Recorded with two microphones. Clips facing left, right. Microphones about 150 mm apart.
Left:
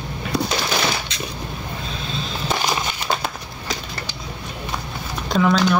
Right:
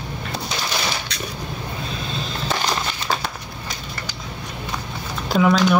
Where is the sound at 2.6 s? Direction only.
10° left (ahead or behind).